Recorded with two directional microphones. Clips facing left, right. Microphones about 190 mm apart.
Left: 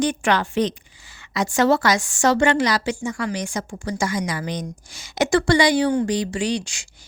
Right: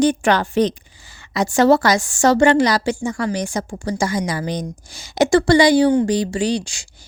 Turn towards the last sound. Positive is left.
turn(degrees=-35)  # may be behind; listen again after turning